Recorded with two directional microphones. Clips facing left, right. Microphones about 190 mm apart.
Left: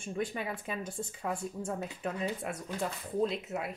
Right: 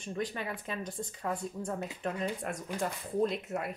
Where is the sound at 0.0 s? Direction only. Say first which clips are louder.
Left 1 dB; 10° left (ahead or behind).